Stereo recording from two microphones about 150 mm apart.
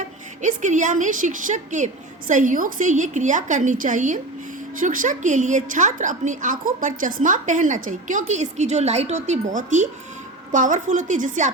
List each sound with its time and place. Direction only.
0.4 s a woman's voice: 55° right (ahead or behind)